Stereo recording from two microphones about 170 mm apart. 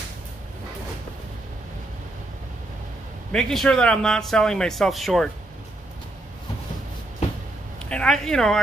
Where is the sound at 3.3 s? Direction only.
Centre (ahead or behind).